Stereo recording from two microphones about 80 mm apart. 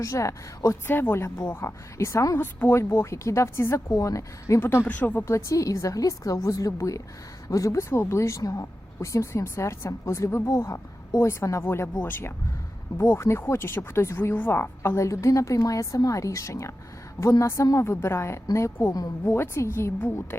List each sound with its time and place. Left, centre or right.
0.0 s speech: left
0.9 s speech: left
4.6 s speech: left
5.2 s a woman's voice: left